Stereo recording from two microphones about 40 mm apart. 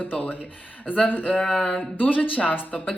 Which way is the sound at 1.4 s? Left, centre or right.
Centre.